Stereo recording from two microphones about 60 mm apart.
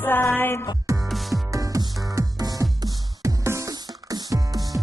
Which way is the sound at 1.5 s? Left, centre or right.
Right.